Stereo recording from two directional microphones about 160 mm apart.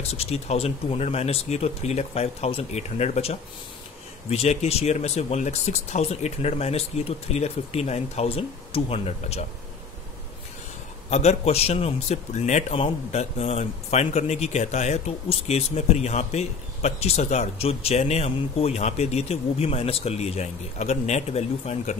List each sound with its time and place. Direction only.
0.1 s speech: 40° left (ahead or behind)
11.1 s speech: 45° left (ahead or behind)